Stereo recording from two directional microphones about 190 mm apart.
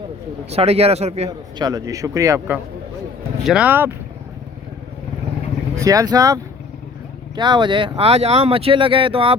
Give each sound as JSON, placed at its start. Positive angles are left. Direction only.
{"t": 0.5, "sound": "speech", "side_deg": -35}
{"t": 1.3, "sound": "a man's voice", "side_deg": -20}
{"t": 3.4, "sound": "a man's voice", "side_deg": -5}
{"t": 5.7, "sound": "a man's voice", "side_deg": -15}